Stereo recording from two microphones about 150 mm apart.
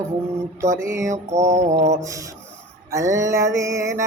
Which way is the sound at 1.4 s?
50° right (ahead or behind).